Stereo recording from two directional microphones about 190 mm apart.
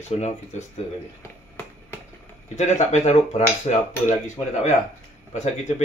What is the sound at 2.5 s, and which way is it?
A man's voice, 35° left (ahead or behind).